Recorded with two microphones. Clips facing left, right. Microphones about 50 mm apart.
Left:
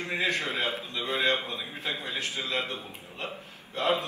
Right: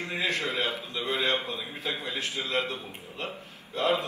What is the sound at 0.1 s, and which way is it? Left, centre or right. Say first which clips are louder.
A man's voice: left 1 dB; left.